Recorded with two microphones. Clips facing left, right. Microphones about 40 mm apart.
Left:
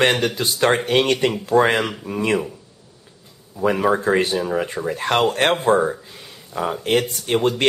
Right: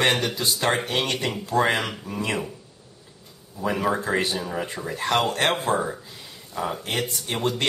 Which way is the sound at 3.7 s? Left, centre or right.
Left.